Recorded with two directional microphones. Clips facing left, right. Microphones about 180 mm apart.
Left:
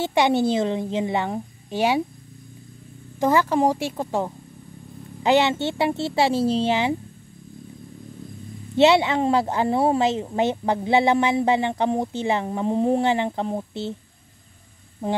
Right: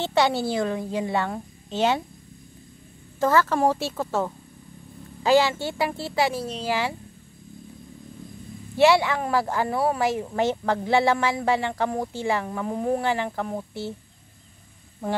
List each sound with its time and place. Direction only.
0.0 s a woman's voice: 15° left (ahead or behind)
3.2 s a woman's voice: 15° left (ahead or behind)
8.7 s a woman's voice: 20° left (ahead or behind)